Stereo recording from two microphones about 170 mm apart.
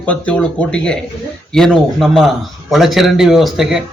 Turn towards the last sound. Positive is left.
turn(degrees=-5)  # may be behind; listen again after turning